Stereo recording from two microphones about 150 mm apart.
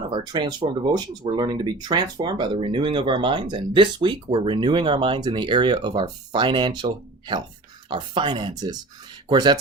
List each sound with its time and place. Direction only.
0.1 s speech: 30° right (ahead or behind)